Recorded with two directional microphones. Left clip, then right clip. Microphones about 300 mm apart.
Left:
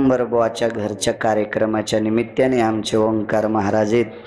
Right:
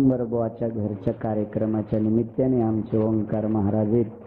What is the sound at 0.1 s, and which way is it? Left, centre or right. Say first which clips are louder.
Speech: left 8 dB; centre.